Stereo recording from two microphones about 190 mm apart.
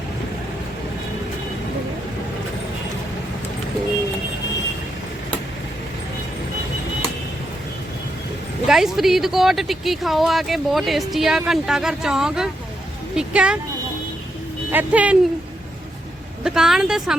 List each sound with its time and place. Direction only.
8.6 s speech: centre (ahead or behind)
14.7 s speech: 10° right (ahead or behind)
16.4 s a woman's voice: 5° right (ahead or behind)